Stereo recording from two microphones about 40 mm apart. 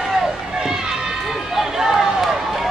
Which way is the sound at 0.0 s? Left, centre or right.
Centre.